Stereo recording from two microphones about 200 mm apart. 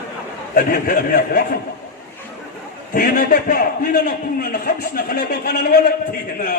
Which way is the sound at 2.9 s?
45° left (ahead or behind).